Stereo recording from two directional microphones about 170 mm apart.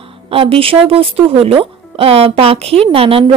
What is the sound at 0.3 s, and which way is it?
Speech, 35° right (ahead or behind).